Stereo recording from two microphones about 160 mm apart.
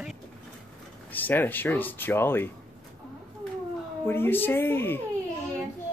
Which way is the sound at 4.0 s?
15° left (ahead or behind).